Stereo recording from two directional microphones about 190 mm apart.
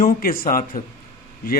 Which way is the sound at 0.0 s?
50° left (ahead or behind).